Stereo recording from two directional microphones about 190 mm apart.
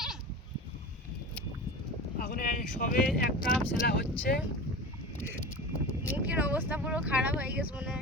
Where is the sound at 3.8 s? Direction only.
55° left (ahead or behind).